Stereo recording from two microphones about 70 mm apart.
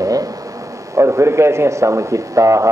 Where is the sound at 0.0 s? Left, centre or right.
Right.